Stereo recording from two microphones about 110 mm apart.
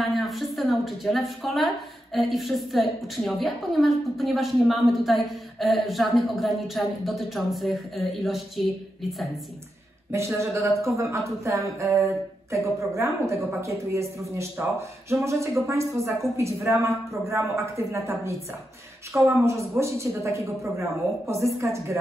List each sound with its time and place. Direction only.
0.0 s a woman's voice: centre (ahead or behind)
10.1 s speech: 25° right (ahead or behind)